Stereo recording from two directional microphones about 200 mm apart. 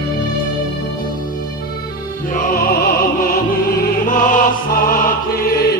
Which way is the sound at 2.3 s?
45° left (ahead or behind).